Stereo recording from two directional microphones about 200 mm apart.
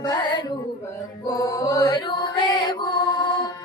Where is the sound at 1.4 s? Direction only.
15° left (ahead or behind).